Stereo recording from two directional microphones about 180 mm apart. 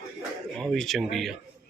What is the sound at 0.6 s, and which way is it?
Speech, centre (ahead or behind).